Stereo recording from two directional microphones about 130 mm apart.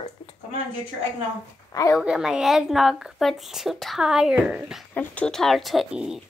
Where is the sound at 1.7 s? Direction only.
25° left (ahead or behind).